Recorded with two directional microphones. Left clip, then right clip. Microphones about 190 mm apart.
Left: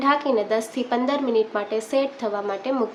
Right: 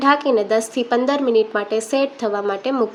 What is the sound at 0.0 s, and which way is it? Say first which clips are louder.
Speech: right 4 dB; 25° right (ahead or behind).